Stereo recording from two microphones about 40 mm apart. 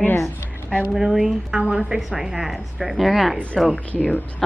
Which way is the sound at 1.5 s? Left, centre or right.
Centre.